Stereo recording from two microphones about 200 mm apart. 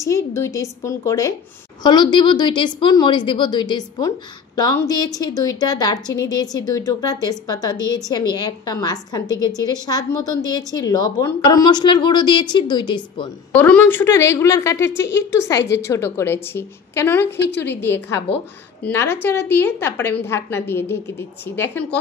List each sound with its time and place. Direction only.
0.0 s a woman's voice: 15° left (ahead or behind)
13.5 s a woman's voice: 5° left (ahead or behind)
14.9 s a woman's voice: 65° left (ahead or behind)
15.1 s a woman's voice: 15° left (ahead or behind)
17.4 s a woman's voice: 60° left (ahead or behind)
17.9 s a woman's voice: 10° left (ahead or behind)